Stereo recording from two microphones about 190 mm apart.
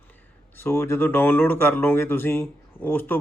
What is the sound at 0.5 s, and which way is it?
Speech, 10° left (ahead or behind).